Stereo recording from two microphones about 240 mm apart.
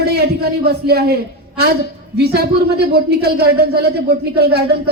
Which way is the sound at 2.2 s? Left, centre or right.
Right.